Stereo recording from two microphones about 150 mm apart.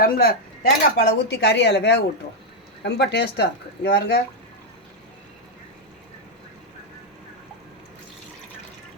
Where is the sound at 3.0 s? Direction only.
90° left.